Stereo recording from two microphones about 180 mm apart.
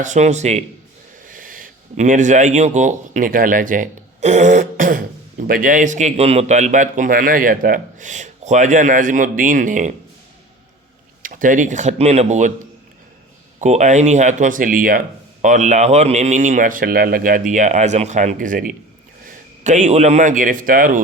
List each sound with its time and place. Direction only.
0.0 s a man's voice: 40° right (ahead or behind)
1.3 s speech: 50° right (ahead or behind)
11.2 s speech: 50° right (ahead or behind)
13.6 s speech: 40° right (ahead or behind)